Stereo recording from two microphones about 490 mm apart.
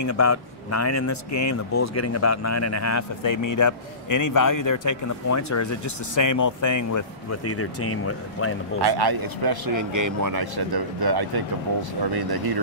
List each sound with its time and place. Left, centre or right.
0.0 s speech: left
8.8 s speech: right